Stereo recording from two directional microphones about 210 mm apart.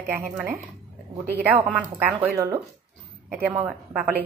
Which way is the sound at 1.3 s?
10° right (ahead or behind).